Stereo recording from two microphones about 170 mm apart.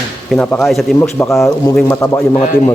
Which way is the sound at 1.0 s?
15° left (ahead or behind).